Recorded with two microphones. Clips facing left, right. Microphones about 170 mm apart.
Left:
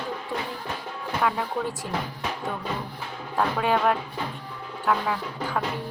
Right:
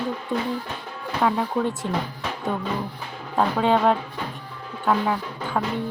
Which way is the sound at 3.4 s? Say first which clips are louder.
Right 4 dB; 25° right (ahead or behind).